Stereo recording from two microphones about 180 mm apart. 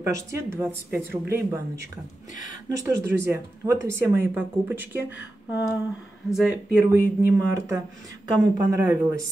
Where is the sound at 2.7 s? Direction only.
15° right (ahead or behind).